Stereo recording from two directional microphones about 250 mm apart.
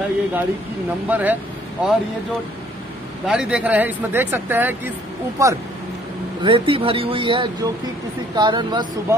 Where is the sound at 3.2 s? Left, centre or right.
Centre.